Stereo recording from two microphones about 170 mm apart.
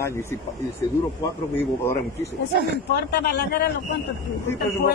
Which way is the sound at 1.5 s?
15° left (ahead or behind).